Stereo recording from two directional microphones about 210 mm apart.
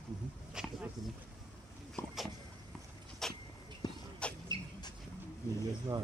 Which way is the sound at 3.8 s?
20° left (ahead or behind).